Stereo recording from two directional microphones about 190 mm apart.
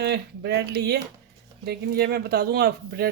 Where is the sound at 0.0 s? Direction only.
60° right (ahead or behind).